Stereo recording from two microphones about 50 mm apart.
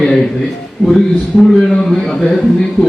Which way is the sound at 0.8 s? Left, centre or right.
Centre.